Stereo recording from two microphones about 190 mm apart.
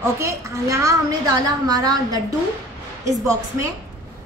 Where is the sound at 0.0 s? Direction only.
15° right (ahead or behind).